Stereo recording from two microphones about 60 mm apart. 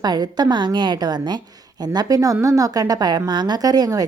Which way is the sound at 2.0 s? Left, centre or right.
Right.